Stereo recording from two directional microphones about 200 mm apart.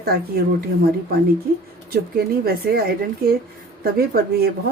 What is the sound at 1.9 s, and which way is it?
Speech, 50° right (ahead or behind).